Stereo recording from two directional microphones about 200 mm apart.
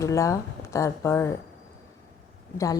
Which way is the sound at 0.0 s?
15° left (ahead or behind).